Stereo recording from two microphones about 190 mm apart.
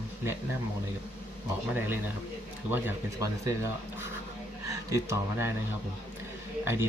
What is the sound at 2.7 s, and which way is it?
Speech, 15° right (ahead or behind).